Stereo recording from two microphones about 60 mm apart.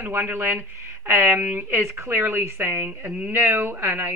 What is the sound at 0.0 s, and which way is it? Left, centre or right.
A woman's voice, right.